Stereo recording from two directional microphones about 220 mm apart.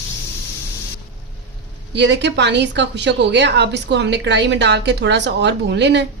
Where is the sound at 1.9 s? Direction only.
50° right (ahead or behind).